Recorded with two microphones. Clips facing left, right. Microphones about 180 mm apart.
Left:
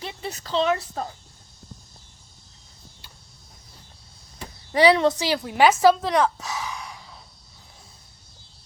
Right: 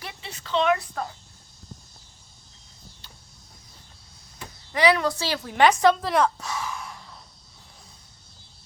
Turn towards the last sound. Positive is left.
turn(degrees=0)  # may be behind; listen again after turning